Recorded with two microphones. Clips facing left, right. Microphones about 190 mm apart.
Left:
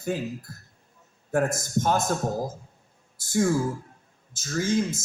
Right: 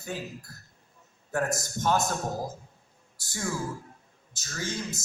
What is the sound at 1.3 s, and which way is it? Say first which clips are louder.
Speech: left 5 dB; 50° left (ahead or behind).